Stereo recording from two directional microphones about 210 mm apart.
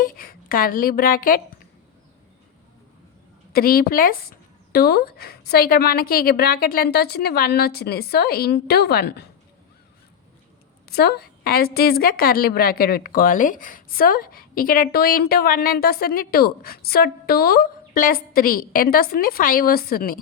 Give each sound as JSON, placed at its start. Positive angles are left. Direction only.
{"t": 0.2, "sound": "a woman's voice", "side_deg": 45}
{"t": 3.5, "sound": "a woman's voice", "side_deg": 45}
{"t": 10.8, "sound": "a woman's voice", "side_deg": 50}